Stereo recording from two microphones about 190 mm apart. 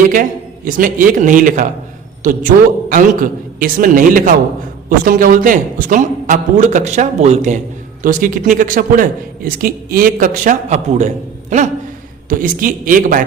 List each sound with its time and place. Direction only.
0.1 s a man's voice: 45° right (ahead or behind)
2.9 s a man's voice: 45° right (ahead or behind)